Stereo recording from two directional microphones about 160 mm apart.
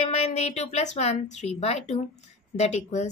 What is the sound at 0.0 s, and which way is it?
A woman's voice, 45° left (ahead or behind).